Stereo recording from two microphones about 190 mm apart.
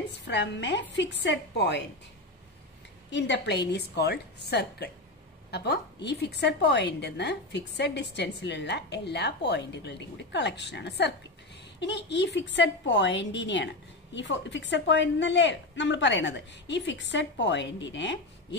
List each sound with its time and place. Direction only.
0.2 s a woman's voice: 65° left (ahead or behind)
3.1 s a woman's voice: 70° left (ahead or behind)